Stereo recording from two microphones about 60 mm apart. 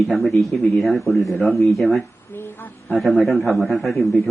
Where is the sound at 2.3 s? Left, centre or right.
Left.